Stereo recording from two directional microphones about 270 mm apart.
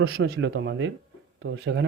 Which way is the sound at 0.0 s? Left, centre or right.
Right.